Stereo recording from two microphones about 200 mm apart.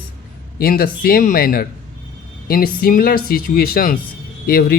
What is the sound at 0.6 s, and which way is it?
A man's voice, 50° left (ahead or behind).